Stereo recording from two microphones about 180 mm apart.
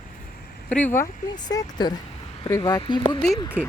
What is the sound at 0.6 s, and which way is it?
Speech, 10° left (ahead or behind).